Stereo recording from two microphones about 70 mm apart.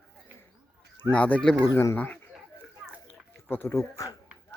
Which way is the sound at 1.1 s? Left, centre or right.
Centre.